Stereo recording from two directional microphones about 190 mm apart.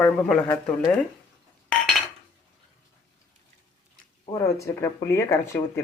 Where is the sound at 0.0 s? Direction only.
5° left (ahead or behind).